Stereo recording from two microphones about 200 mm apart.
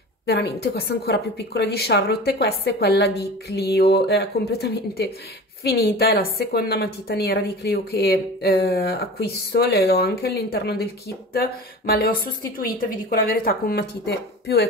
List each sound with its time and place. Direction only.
0.3 s a woman's voice: 55° left (ahead or behind)
11.9 s a woman's voice: 50° left (ahead or behind)